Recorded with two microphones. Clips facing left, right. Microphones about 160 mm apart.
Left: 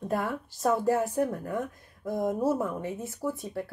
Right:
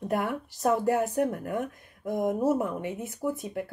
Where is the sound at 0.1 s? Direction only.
20° right (ahead or behind).